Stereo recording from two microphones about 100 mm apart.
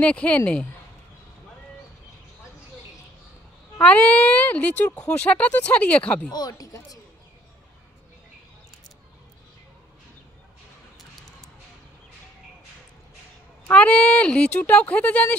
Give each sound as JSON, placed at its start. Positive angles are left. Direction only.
{"t": 0.0, "sound": "speech", "side_deg": 15}
{"t": 3.8, "sound": "speech", "side_deg": 15}
{"t": 6.3, "sound": "speech", "side_deg": 40}
{"t": 13.7, "sound": "speech", "side_deg": 15}